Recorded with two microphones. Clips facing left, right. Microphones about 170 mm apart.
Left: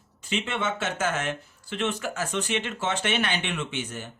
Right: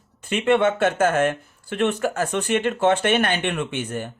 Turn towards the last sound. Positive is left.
turn(degrees=-55)  # may be behind; listen again after turning